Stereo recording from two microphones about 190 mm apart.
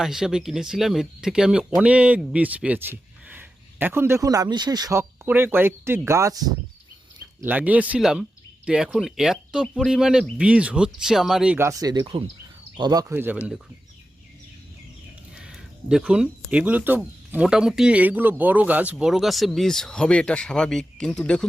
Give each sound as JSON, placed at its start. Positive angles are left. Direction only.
{"t": 0.0, "sound": "speech", "side_deg": -5}
{"t": 15.4, "sound": "a sound", "side_deg": -5}
{"t": 16.5, "sound": "speech", "side_deg": -5}